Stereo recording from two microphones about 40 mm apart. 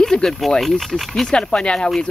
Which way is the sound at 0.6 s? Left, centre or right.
Centre.